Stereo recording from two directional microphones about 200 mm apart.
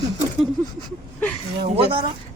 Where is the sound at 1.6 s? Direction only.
25° right (ahead or behind).